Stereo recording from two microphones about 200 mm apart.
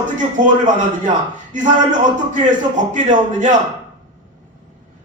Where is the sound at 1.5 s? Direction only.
40° right (ahead or behind).